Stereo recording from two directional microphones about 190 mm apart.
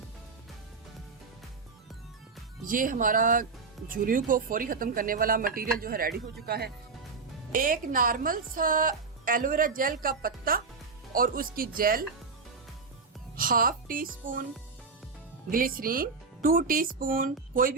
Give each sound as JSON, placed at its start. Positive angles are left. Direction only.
{"t": 2.6, "sound": "speech", "side_deg": -45}
{"t": 13.3, "sound": "speech", "side_deg": -50}
{"t": 15.4, "sound": "speech", "side_deg": -50}